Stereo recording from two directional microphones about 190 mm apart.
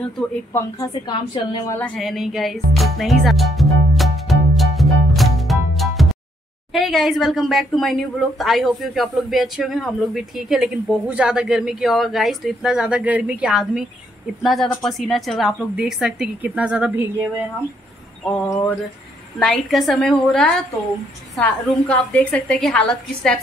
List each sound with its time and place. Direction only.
0.5 s a woman's voice: 15° left (ahead or behind)
1.8 s music: centre (ahead or behind)
6.7 s speech: centre (ahead or behind)
18.4 s a sound: 10° left (ahead or behind)
19.4 s speech: centre (ahead or behind)